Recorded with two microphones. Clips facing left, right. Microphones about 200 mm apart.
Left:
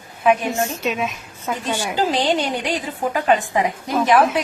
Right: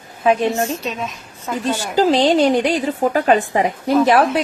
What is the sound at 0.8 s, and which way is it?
Speech, 5° left (ahead or behind).